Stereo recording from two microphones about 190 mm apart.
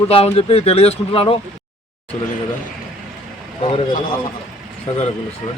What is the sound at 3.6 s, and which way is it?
Speech, 30° left (ahead or behind).